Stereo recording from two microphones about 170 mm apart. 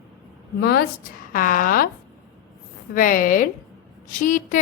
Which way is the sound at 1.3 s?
55° left (ahead or behind).